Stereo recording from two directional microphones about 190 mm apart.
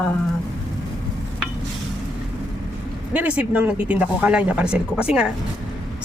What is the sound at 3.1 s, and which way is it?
A woman's voice, 10° right (ahead or behind).